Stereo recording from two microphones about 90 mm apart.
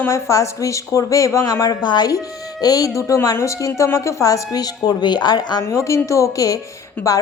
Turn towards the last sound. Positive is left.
turn(degrees=35)  # may be behind; listen again after turning